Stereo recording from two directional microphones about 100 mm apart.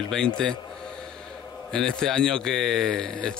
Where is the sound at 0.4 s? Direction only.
5° left (ahead or behind).